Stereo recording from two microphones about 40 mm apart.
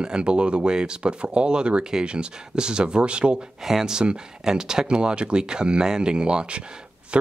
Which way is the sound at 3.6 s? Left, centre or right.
Centre.